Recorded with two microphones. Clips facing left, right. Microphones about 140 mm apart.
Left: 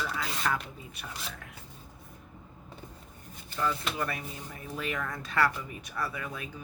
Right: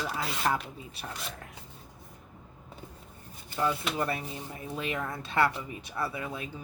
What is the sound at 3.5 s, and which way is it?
Speech, 15° right (ahead or behind).